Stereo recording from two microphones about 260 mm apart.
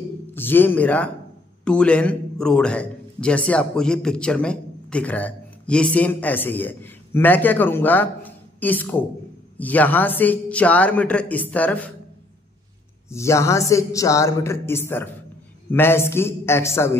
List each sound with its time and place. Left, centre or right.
0.3 s a man's voice: centre
13.1 s speech: centre